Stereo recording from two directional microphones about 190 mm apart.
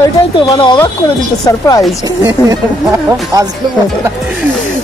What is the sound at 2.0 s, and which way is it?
Speech, 20° right (ahead or behind).